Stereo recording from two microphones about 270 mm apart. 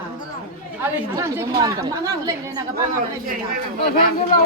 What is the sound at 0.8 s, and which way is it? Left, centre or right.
Speech, centre.